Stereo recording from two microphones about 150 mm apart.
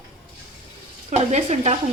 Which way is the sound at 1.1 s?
50° right (ahead or behind).